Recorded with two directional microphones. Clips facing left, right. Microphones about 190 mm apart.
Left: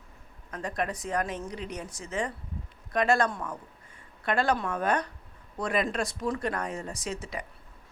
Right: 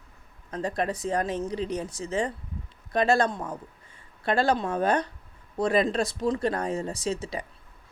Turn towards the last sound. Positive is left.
turn(degrees=-30)  # may be behind; listen again after turning